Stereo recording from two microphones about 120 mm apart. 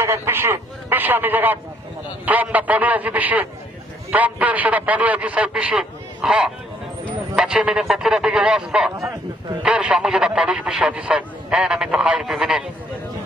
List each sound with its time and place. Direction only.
0.0 s a man's voice: 20° right (ahead or behind); by 12.6 s 5° right (ahead or behind)